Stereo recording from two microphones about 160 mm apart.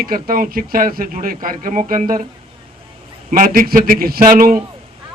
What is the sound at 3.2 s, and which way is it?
Speech, 60° right (ahead or behind).